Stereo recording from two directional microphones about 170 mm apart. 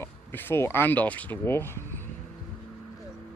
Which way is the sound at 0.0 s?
15° left (ahead or behind).